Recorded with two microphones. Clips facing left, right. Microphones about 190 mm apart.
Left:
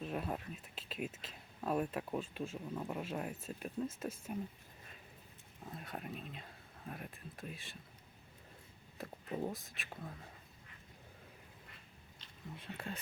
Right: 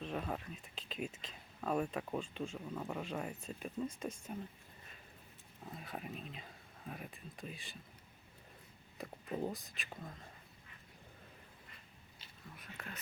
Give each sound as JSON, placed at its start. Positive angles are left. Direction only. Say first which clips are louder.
{"t": 0.0, "sound": "speech", "louder": "left 1 dB", "side_deg": 5}
{"t": 5.6, "sound": "speech", "louder": "even", "side_deg": 0}
{"t": 9.0, "sound": "speech", "louder": "even", "side_deg": 0}
{"t": 12.5, "sound": "speech", "louder": "left 6 dB", "side_deg": 30}